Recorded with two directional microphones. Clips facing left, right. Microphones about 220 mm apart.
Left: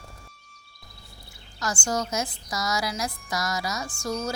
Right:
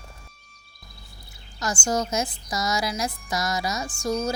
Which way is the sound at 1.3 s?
20° right (ahead or behind).